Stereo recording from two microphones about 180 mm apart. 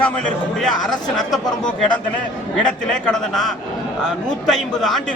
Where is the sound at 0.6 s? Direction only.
5° left (ahead or behind).